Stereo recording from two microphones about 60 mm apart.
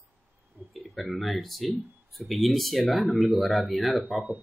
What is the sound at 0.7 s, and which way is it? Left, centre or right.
Speech, centre.